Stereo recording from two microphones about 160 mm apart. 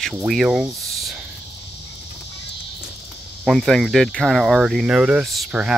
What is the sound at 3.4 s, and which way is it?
Speech, centre (ahead or behind).